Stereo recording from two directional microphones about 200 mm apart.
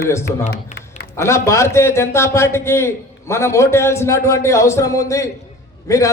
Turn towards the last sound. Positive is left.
turn(degrees=15)  # may be behind; listen again after turning